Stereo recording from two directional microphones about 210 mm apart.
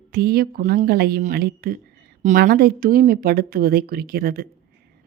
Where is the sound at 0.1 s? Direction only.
45° right (ahead or behind).